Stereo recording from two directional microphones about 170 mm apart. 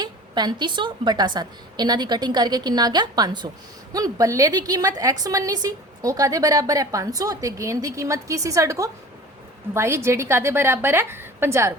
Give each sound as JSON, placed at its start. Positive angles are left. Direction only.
{"t": 0.0, "sound": "a woman's voice", "side_deg": -25}